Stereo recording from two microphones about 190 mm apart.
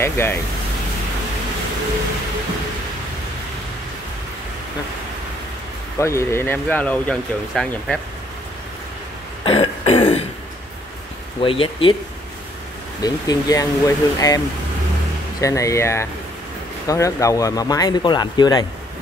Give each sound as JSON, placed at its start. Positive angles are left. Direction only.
{"t": 0.0, "sound": "speech", "side_deg": 10}
{"t": 5.9, "sound": "speech", "side_deg": 15}
{"t": 9.4, "sound": "throat clearing", "side_deg": 30}
{"t": 11.4, "sound": "speech", "side_deg": 30}
{"t": 13.0, "sound": "speech", "side_deg": 20}
{"t": 15.4, "sound": "speech", "side_deg": 15}